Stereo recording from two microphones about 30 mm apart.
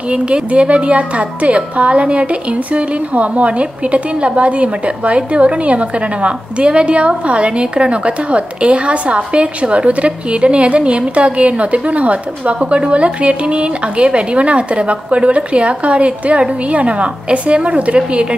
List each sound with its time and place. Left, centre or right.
0.1 s a woman's voice: right